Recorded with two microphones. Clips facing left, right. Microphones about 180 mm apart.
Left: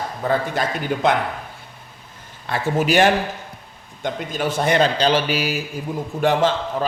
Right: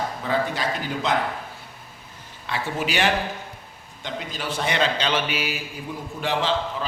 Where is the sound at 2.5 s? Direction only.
45° left (ahead or behind).